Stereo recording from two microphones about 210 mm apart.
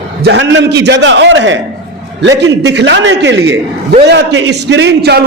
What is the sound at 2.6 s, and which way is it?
A man's voice, 55° right (ahead or behind).